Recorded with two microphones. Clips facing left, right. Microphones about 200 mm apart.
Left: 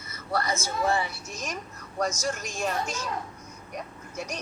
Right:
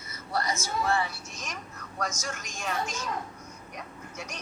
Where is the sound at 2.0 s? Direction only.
40° left (ahead or behind).